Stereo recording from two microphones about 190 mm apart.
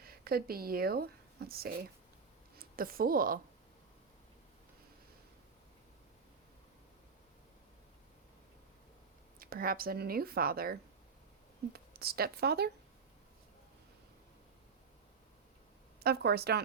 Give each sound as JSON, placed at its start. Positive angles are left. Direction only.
{"t": 0.0, "sound": "a woman's voice", "side_deg": -50}
{"t": 9.4, "sound": "speech", "side_deg": -50}
{"t": 16.0, "sound": "a woman's voice", "side_deg": -55}